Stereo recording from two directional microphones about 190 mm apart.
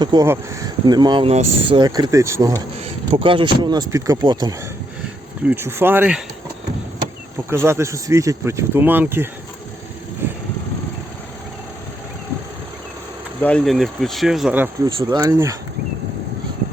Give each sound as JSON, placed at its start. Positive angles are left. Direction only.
{"t": 0.0, "sound": "speech", "side_deg": -20}
{"t": 3.1, "sound": "speech", "side_deg": -30}
{"t": 7.5, "sound": "speech", "side_deg": -15}
{"t": 13.4, "sound": "speech", "side_deg": 5}
{"t": 14.8, "sound": "speech", "side_deg": -25}